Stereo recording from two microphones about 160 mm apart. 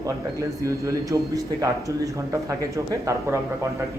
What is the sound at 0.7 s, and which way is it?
A man's voice, 20° right (ahead or behind).